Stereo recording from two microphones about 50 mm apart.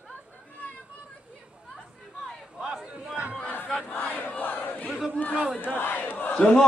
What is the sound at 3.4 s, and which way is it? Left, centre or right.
Battle cry, left.